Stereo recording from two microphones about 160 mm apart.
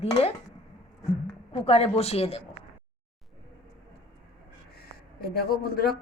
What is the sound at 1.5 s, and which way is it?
Speech, 40° left (ahead or behind).